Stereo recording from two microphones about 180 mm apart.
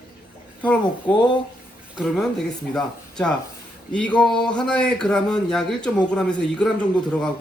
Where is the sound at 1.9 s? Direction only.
Centre (ahead or behind).